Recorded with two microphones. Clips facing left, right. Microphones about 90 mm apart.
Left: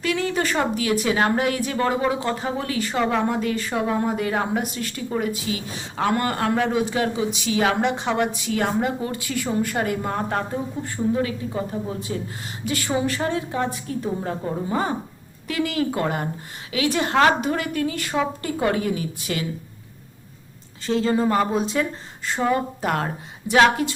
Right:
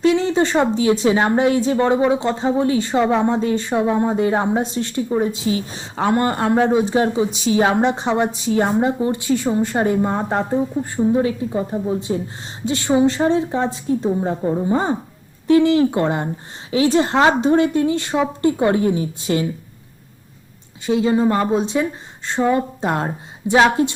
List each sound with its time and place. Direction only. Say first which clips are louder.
0.0 s speech: right 7 dB; 25° right (ahead or behind)
20.8 s a woman's voice: right 4 dB; 10° right (ahead or behind)
21.2 s speech: right 3 dB; 20° right (ahead or behind)